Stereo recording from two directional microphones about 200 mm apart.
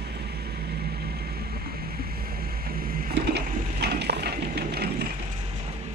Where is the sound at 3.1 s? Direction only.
55° right (ahead or behind).